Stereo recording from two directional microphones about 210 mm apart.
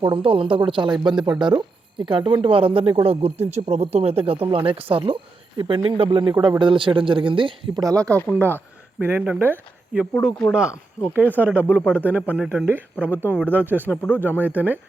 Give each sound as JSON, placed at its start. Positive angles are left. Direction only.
{"t": 0.0, "sound": "speech", "side_deg": -25}
{"t": 13.8, "sound": "speech", "side_deg": 5}
{"t": 14.2, "sound": "speech", "side_deg": -10}